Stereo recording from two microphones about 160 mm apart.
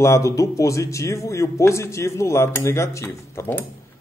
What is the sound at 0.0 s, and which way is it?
Speech, 20° left (ahead or behind).